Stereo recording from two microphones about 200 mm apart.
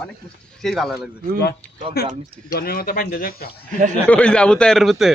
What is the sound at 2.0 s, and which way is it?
Speech, 50° left (ahead or behind).